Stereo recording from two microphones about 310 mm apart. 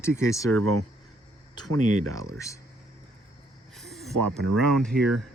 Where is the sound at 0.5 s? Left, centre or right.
Right.